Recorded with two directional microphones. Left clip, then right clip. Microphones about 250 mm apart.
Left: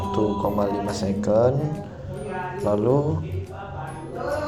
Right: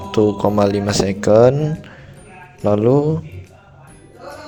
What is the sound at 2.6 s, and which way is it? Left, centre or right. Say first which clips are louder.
Mantra: right 7 dB; right.